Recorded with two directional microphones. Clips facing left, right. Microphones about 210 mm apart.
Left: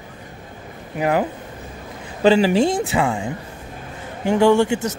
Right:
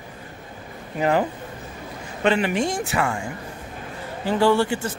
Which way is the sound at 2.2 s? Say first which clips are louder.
Left 6 dB; 30° left (ahead or behind).